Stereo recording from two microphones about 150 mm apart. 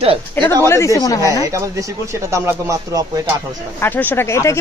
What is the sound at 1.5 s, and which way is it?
Speech, 20° right (ahead or behind).